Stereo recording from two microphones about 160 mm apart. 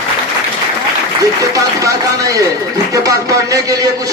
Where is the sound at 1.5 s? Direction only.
20° right (ahead or behind).